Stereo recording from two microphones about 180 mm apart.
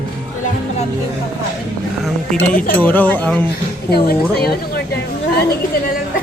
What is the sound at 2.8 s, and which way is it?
Speech, 10° left (ahead or behind).